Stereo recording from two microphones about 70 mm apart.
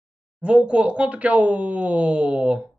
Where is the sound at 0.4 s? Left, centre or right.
Centre.